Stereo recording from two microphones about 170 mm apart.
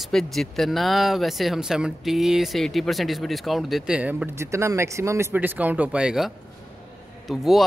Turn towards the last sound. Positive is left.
turn(degrees=0)  # may be behind; listen again after turning